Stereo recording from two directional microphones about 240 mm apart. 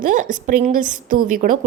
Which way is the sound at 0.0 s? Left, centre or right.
Right.